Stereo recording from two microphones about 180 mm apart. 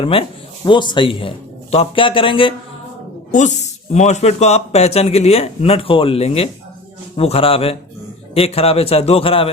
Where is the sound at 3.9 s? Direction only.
40° left (ahead or behind).